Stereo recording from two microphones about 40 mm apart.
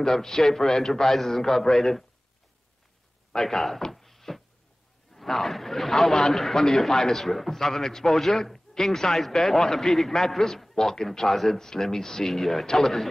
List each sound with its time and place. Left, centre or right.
0.0 s a man's voice: centre
3.3 s a man's voice: centre
3.9 s a sound: centre
5.1 s a man's voice: centre